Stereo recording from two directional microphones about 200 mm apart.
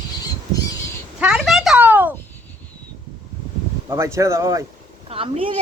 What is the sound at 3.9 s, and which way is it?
Speech, 15° right (ahead or behind).